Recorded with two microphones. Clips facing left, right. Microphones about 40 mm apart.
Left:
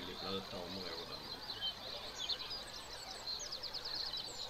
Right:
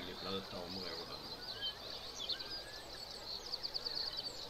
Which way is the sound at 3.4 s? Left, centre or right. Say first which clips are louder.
Right 1 dB; left.